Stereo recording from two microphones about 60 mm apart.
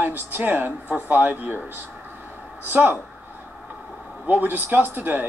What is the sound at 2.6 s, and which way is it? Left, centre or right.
Speech, right.